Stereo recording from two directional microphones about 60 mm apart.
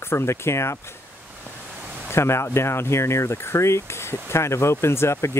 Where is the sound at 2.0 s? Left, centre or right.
Left.